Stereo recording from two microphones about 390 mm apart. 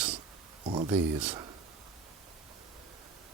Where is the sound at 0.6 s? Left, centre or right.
Centre.